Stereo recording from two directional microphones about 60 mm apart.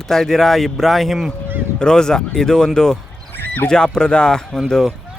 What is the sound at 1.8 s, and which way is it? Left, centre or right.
Speech, centre.